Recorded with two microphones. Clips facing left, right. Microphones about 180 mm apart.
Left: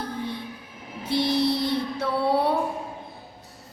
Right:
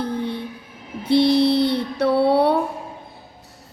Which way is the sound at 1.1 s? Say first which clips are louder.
Right 7 dB; 65° right (ahead or behind).